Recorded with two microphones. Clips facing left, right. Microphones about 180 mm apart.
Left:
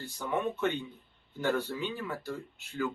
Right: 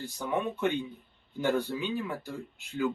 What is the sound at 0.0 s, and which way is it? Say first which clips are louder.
Speech: right 1 dB; 15° right (ahead or behind).